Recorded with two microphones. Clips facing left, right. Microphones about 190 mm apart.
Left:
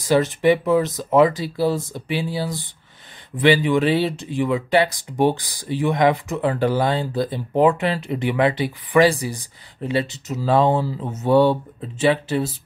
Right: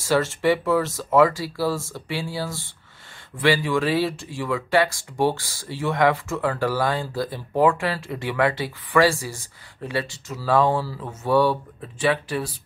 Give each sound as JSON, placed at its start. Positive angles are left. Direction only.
{"t": 0.0, "sound": "speech", "side_deg": 15}